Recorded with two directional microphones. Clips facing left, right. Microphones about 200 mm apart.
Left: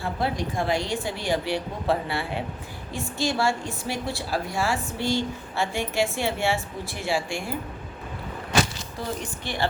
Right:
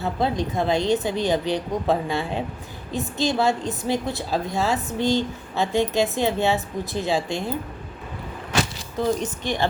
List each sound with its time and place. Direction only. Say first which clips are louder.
0.0 s a woman's voice: right 4 dB; 20° right (ahead or behind)
9.2 s a woman's voice: right 5 dB; 20° right (ahead or behind)